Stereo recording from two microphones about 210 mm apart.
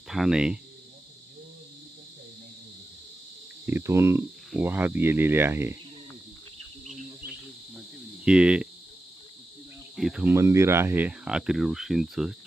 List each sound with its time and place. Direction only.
0.1 s speech: centre (ahead or behind)
3.7 s speech: 10° right (ahead or behind)
8.2 s speech: 5° right (ahead or behind)
9.9 s speech: centre (ahead or behind)